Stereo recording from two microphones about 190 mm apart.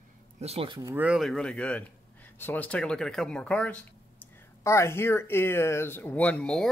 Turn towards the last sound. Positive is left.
turn(degrees=5)  # may be behind; listen again after turning